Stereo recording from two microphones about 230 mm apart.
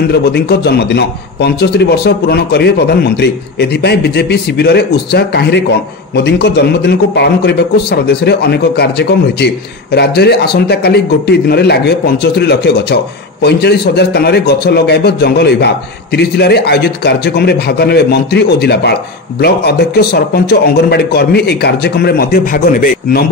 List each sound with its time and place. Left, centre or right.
0.1 s speech: left